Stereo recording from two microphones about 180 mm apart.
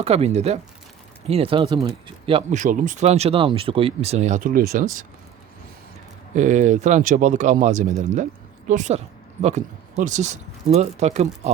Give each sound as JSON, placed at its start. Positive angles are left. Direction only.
{"t": 0.0, "sound": "speech", "side_deg": -35}
{"t": 2.6, "sound": "speech", "side_deg": -45}
{"t": 6.3, "sound": "speech", "side_deg": -45}